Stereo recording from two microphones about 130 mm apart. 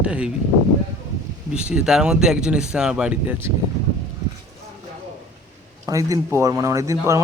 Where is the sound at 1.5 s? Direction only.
5° right (ahead or behind).